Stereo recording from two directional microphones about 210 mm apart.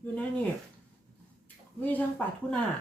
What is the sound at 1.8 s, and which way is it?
Speech, 10° left (ahead or behind).